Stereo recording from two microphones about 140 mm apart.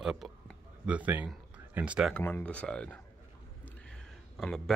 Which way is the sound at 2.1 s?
10° left (ahead or behind).